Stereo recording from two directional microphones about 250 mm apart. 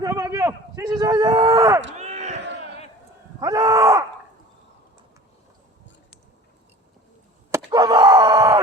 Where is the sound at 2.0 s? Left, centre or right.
Right.